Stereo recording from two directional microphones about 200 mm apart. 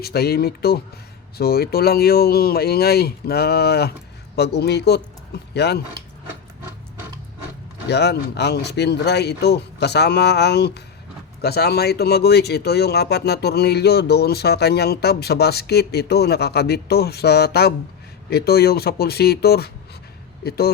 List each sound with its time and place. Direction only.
0.0 s a man's voice: 50° left (ahead or behind)
7.9 s speech: 55° left (ahead or behind)